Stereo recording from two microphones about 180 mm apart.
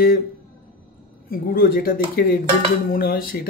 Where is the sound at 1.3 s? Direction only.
55° left (ahead or behind).